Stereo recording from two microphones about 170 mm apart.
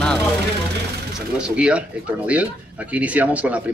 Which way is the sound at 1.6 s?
5° right (ahead or behind).